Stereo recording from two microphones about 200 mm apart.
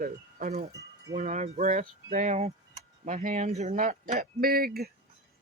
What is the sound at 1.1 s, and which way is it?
Speech, 35° right (ahead or behind).